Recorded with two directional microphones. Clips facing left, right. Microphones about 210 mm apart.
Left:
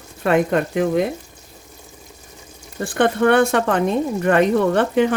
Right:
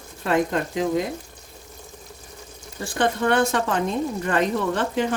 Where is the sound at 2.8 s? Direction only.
60° left (ahead or behind).